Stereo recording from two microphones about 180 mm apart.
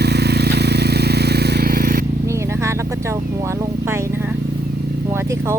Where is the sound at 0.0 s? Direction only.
65° right (ahead or behind).